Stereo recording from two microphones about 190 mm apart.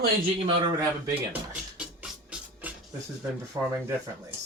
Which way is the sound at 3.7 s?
15° right (ahead or behind).